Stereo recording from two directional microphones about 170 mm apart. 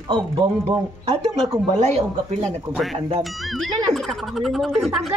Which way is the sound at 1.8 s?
40° right (ahead or behind).